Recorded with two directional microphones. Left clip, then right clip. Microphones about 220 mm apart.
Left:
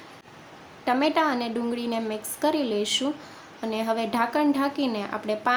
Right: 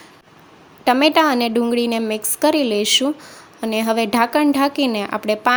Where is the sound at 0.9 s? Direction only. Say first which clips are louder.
Right 9 dB; 40° right (ahead or behind).